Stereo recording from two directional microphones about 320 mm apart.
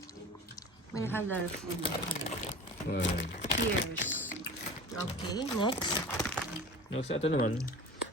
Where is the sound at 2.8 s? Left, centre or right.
Left.